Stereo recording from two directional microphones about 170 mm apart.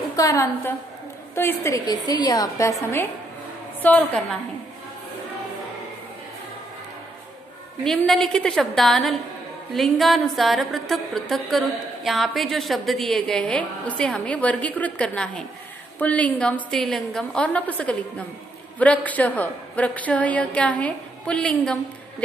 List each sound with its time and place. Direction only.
0.1 s a woman's voice: 20° left (ahead or behind)
7.8 s a sound: centre (ahead or behind)
16.0 s a woman's voice: 10° left (ahead or behind)